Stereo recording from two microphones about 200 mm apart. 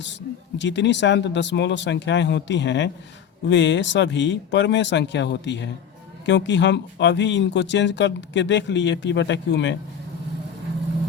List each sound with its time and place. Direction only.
0.6 s speech: 60° left (ahead or behind)